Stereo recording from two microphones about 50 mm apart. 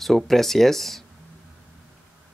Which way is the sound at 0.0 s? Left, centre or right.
Centre.